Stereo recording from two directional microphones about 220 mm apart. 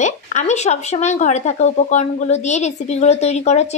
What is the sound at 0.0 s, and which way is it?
Speech, 35° left (ahead or behind).